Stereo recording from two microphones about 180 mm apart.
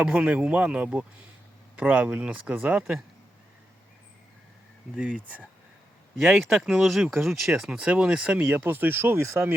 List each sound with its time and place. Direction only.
0.0 s speech: 5° right (ahead or behind)
4.9 s speech: 5° right (ahead or behind)